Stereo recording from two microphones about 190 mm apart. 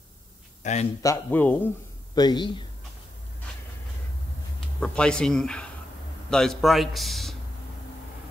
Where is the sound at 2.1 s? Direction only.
20° left (ahead or behind).